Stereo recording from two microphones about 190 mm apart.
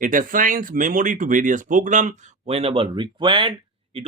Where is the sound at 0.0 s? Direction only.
45° right (ahead or behind).